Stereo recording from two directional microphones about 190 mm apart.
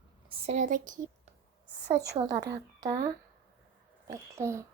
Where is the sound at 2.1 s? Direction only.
20° right (ahead or behind).